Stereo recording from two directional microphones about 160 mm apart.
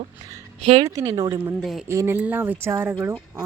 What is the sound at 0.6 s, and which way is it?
Speech, 40° right (ahead or behind).